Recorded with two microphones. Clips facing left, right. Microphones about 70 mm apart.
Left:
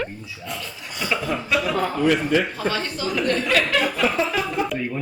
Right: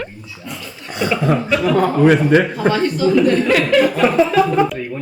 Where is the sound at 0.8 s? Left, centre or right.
Right.